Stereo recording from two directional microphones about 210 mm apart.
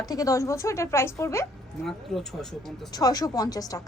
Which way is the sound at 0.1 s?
15° left (ahead or behind).